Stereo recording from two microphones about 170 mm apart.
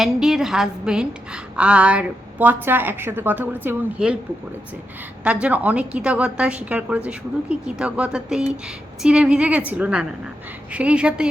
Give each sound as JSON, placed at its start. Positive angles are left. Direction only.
{"t": 0.0, "sound": "a woman's voice", "side_deg": 0}
{"t": 5.2, "sound": "a woman's voice", "side_deg": -5}